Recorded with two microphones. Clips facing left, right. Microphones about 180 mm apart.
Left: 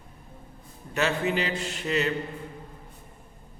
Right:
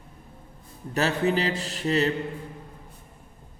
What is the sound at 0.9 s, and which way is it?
A man's voice, 35° right (ahead or behind).